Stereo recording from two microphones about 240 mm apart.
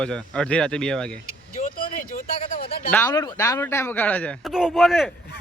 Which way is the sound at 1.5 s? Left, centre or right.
Left.